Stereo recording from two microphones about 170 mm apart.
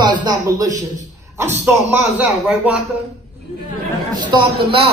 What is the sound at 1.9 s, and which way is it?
Speech, 10° right (ahead or behind).